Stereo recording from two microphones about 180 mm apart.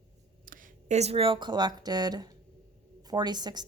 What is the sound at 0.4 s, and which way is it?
Speech, 45° right (ahead or behind).